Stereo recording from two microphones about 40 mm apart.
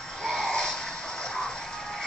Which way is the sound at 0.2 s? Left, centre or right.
Centre.